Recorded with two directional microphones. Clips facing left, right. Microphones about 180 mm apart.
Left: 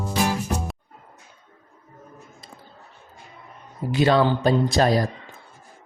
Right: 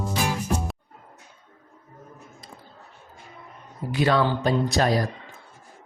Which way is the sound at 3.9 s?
25° left (ahead or behind).